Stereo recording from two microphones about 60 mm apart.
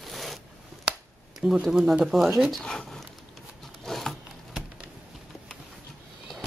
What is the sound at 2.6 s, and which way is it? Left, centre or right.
Speech, centre.